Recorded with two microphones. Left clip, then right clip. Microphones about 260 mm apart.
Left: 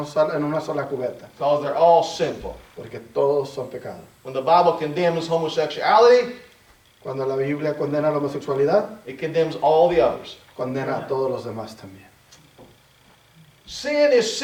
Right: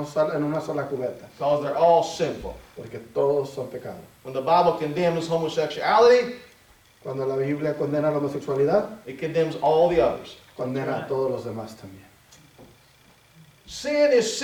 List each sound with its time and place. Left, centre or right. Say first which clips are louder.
0.0 s speech: left 3 dB; centre
0.7 s a man's voice: left 2 dB; centre
1.4 s speech: left 3 dB; centre
2.3 s speech: left 2 dB; left
3.6 s a man's voice: left 2 dB; centre
4.3 s speech: left 3 dB; centre
7.0 s a man's voice: left 2 dB; centre
9.0 s speech: left 2 dB; centre
10.6 s a man's voice: left 2 dB; centre
13.7 s speech: left 2 dB; centre